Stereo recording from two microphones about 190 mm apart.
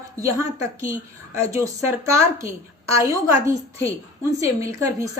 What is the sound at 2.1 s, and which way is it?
A woman's voice, 15° right (ahead or behind).